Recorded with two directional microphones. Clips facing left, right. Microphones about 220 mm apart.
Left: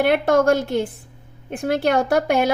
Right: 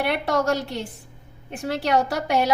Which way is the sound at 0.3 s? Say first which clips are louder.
Left 6 dB; 50° left (ahead or behind).